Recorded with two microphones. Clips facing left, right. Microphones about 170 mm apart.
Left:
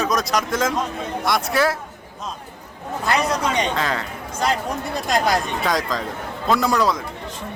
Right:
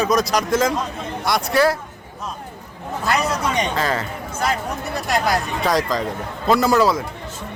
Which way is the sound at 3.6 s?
Centre (ahead or behind).